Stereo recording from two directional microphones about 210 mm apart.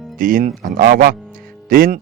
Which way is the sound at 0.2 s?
40° right (ahead or behind).